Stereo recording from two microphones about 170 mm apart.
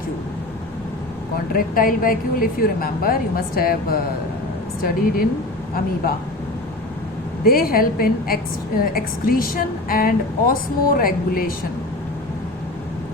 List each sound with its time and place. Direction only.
1.5 s a woman's voice: 55° left (ahead or behind)
7.4 s a woman's voice: 60° left (ahead or behind)